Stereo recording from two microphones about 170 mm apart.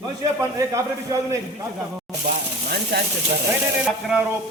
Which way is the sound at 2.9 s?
75° right (ahead or behind).